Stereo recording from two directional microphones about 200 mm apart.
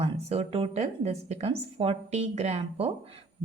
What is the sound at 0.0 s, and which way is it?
A woman's voice, 30° right (ahead or behind).